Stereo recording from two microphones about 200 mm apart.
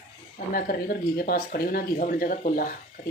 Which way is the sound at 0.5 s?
45° left (ahead or behind).